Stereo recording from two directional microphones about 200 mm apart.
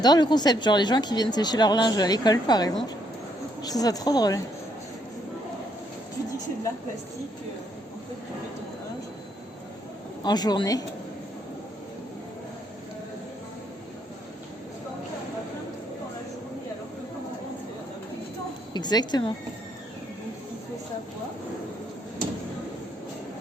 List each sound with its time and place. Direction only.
0.0 s speech: 20° left (ahead or behind)
10.2 s speech: 20° left (ahead or behind)
18.7 s speech: 20° left (ahead or behind)